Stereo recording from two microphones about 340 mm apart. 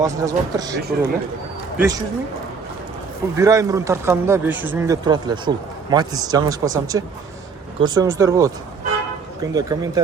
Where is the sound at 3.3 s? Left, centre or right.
Centre.